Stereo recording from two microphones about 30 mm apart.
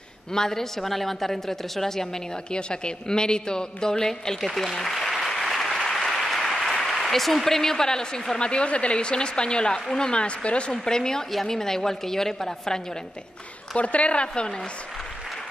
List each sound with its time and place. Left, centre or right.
0.3 s a woman's voice: centre
2.5 s a woman's voice: left
5.1 s applause: centre
6.5 s speech: centre; by 8.2 s left
8.4 s a woman's voice: left
10.7 s a woman's voice: left
13.7 s a woman's voice: left